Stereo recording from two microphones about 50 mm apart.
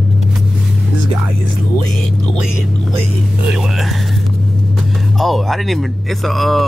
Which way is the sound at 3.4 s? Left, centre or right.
Centre.